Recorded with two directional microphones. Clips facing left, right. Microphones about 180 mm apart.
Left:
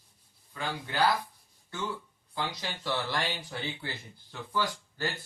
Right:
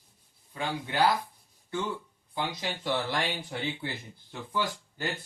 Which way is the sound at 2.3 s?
20° right (ahead or behind).